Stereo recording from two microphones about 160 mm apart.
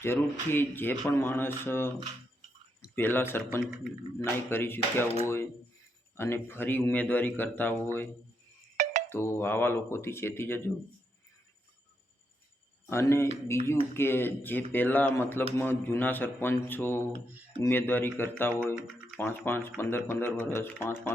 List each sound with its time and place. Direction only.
0.0 s speech: 15° left (ahead or behind)
8.8 s a sound: 50° right (ahead or behind)
9.0 s speech: 15° left (ahead or behind)
12.9 s speech: 15° left (ahead or behind)